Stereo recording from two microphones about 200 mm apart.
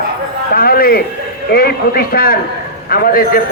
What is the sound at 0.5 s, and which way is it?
A man's voice, 45° left (ahead or behind).